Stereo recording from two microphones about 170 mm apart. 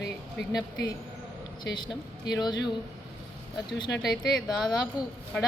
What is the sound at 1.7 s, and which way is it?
Speech, 25° left (ahead or behind).